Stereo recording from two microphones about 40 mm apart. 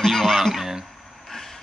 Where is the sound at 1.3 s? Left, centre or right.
Centre.